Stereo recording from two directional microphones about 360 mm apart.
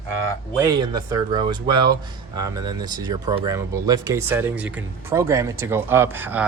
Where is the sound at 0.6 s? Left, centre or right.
Centre.